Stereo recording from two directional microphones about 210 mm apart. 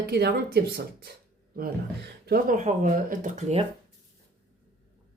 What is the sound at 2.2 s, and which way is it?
Speech, 40° right (ahead or behind).